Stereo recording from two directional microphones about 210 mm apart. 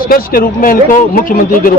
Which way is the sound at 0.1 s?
40° left (ahead or behind).